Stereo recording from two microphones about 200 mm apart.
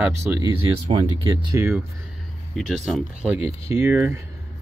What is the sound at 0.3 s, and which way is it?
Speech, 10° right (ahead or behind).